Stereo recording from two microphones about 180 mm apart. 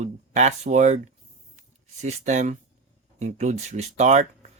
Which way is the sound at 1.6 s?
40° right (ahead or behind).